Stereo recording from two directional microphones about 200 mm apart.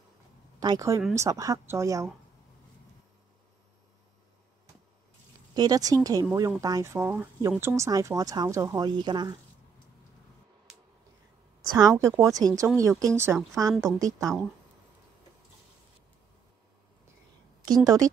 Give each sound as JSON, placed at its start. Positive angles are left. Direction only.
{"t": 0.6, "sound": "speech", "side_deg": -15}
{"t": 5.5, "sound": "speech", "side_deg": -20}
{"t": 11.7, "sound": "speech", "side_deg": -15}
{"t": 17.6, "sound": "speech", "side_deg": -20}